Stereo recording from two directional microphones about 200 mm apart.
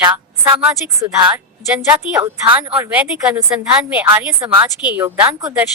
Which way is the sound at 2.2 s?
25° right (ahead or behind).